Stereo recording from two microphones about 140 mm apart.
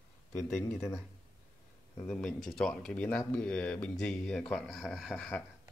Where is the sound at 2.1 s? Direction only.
5° left (ahead or behind).